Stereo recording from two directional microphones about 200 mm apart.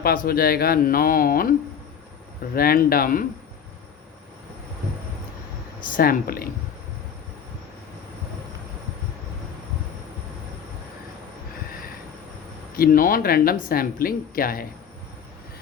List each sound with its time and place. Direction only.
0.0 s speech: 50° left (ahead or behind)
2.6 s speech: 50° left (ahead or behind)
6.0 s speech: 45° left (ahead or behind)
12.7 s speech: 45° left (ahead or behind)